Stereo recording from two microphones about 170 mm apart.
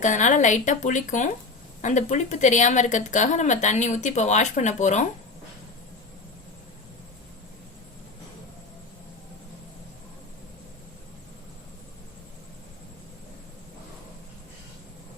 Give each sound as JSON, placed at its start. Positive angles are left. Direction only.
{"t": 0.0, "sound": "speech", "side_deg": 45}